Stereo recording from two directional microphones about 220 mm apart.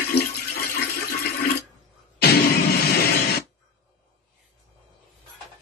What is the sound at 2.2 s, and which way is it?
Music, 45° left (ahead or behind).